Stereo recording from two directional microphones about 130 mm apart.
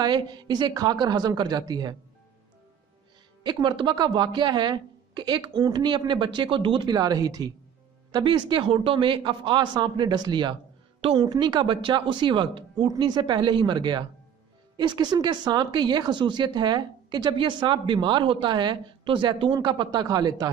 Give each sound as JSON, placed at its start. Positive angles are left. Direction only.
{"t": 0.0, "sound": "speech", "side_deg": -35}
{"t": 3.4, "sound": "speech", "side_deg": -35}